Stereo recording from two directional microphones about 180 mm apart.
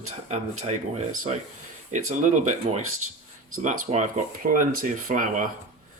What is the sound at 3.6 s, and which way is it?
Speech, 40° right (ahead or behind).